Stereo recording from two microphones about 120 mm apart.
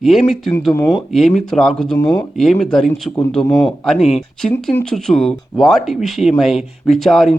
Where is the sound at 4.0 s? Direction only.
65° left (ahead or behind).